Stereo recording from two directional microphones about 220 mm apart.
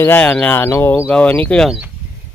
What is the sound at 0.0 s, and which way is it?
A man's voice, 5° left (ahead or behind).